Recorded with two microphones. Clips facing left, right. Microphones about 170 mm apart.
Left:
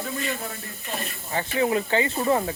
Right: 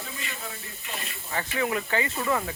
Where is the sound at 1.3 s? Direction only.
30° left (ahead or behind).